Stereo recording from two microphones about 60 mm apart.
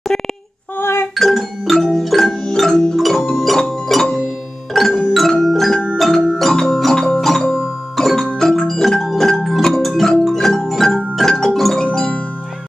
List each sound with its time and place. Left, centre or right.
0.7 s music: left
1.1 s marimba: centre
4.7 s music: centre